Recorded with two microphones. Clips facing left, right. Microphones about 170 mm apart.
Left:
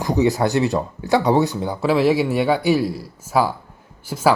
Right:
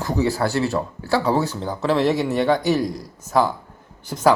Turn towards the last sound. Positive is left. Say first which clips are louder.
# even
turn(degrees=5)  # may be behind; listen again after turning